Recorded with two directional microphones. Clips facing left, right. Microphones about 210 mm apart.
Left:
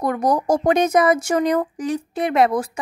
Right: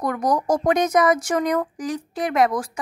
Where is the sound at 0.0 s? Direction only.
25° left (ahead or behind).